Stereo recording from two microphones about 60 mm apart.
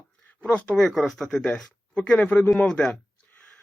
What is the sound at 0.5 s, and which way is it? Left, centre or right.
Speech, centre.